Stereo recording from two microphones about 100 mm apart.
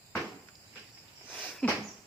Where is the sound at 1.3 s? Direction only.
10° left (ahead or behind).